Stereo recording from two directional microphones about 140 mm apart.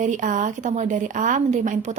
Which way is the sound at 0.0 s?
65° right (ahead or behind).